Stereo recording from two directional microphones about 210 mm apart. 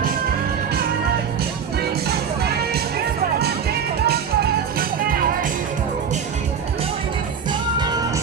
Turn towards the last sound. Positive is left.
turn(degrees=-20)  # may be behind; listen again after turning